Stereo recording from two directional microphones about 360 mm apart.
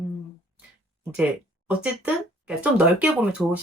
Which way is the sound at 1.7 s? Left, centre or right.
Centre.